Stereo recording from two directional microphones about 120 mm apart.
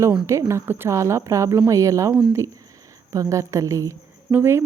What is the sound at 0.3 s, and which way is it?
Speech, 25° right (ahead or behind).